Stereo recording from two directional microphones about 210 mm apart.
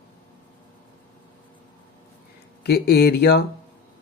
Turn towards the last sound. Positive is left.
turn(degrees=50)  # may be behind; listen again after turning